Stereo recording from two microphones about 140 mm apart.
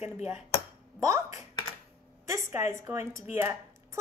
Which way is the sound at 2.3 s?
20° right (ahead or behind).